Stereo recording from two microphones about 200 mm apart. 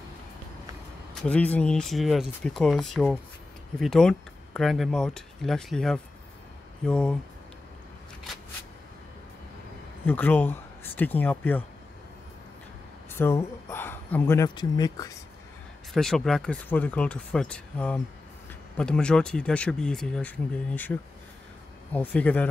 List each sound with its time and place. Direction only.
1.2 s speech: 5° left (ahead or behind)
10.0 s speech: 10° left (ahead or behind)
13.1 s speech: 10° left (ahead or behind)
15.9 s speech: centre (ahead or behind)
22.1 s speech: 5° left (ahead or behind)